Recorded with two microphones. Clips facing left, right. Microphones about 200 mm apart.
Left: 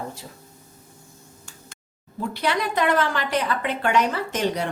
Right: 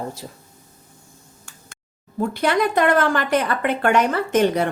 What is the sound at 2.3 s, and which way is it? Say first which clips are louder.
A woman's voice: right 5 dB; 50° right (ahead or behind).